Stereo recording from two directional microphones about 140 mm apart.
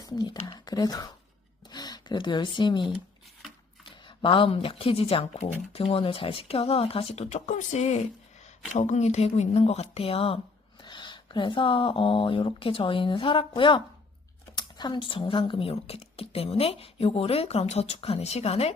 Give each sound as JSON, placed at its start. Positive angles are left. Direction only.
{"t": 0.0, "sound": "speech", "side_deg": 30}